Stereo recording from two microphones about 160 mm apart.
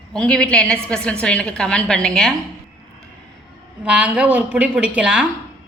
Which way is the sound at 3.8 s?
10° right (ahead or behind).